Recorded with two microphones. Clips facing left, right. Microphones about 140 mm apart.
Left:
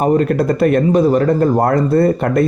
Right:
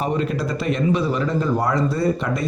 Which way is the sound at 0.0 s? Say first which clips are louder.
Left 9 dB; 50° left (ahead or behind).